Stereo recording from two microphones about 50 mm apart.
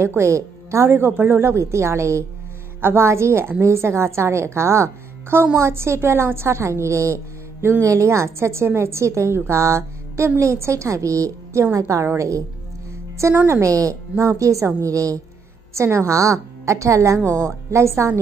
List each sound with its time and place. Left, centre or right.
0.0 s speech: right
2.8 s speech: right
3.6 s a woman's voice: right
7.8 s a woman's voice: right
11.7 s a woman's voice: right
12.2 s a woman's voice: right
13.5 s a woman's voice: right
15.7 s a woman's voice: right